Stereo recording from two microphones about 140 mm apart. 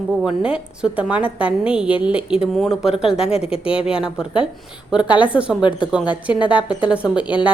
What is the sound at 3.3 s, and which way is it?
Speech, 45° left (ahead or behind).